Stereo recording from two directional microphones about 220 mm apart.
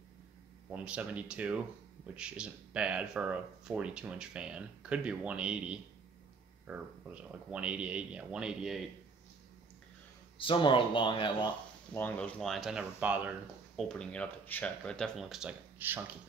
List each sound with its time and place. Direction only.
0.7 s speech: 5° right (ahead or behind)
10.3 s speech: 20° left (ahead or behind)
11.9 s speech: 5° left (ahead or behind)
13.7 s speech: 5° left (ahead or behind)